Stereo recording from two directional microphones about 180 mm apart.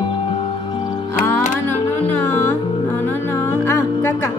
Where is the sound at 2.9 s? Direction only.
10° left (ahead or behind).